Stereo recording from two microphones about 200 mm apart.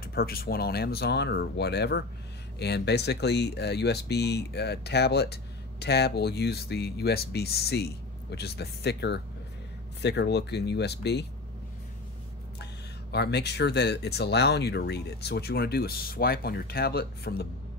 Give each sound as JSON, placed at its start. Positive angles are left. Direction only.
{"t": 0.0, "sound": "speech", "side_deg": 50}
{"t": 13.1, "sound": "speech", "side_deg": 55}